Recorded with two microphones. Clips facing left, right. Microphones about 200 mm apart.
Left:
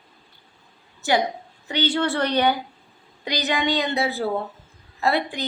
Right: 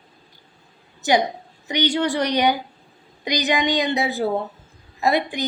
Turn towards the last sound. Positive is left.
turn(degrees=-15)  # may be behind; listen again after turning